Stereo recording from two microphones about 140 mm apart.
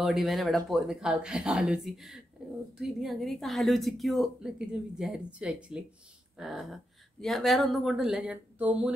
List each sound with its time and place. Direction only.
0.0 s speech: centre (ahead or behind)